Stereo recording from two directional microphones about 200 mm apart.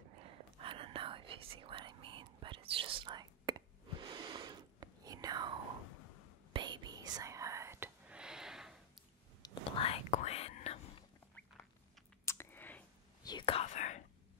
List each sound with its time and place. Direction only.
0.6 s whispering: 25° right (ahead or behind)
6.5 s whispering: 20° right (ahead or behind); by 8.7 s centre (ahead or behind)
9.4 s whispering: 30° left (ahead or behind)
12.3 s a sound: 10° left (ahead or behind)
13.3 s whispering: 25° left (ahead or behind)